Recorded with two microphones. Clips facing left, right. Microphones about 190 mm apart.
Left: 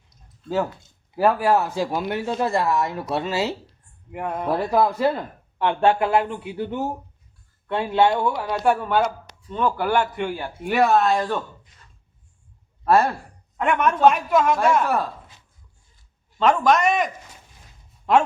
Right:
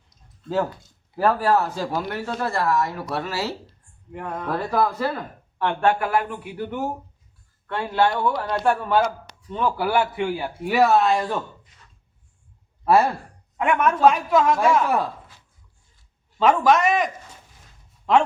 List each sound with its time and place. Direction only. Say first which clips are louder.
1.1 s speech: left 1 dB; 10° left (ahead or behind); by 11.3 s 10° right (ahead or behind)
12.8 s speech: even; 5° right (ahead or behind)
16.4 s speech: right 1 dB; 5° right (ahead or behind)